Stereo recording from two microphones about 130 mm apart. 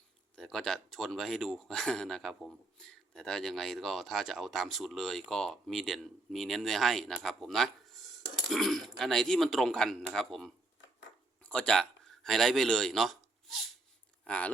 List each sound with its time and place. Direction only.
0.3 s speech: 5° left (ahead or behind)